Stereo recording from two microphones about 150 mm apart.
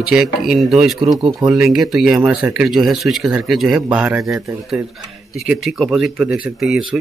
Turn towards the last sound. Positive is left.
turn(degrees=0)  # may be behind; listen again after turning